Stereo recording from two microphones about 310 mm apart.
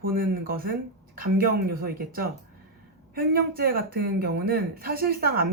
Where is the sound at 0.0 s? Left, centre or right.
Right.